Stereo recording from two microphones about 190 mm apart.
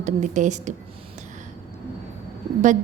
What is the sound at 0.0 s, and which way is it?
Speech, 40° right (ahead or behind).